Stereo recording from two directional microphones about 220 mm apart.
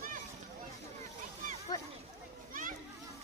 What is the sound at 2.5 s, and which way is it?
Children playing, 35° right (ahead or behind).